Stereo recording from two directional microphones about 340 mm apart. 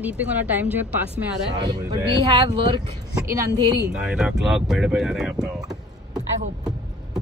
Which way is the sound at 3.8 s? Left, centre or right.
Centre.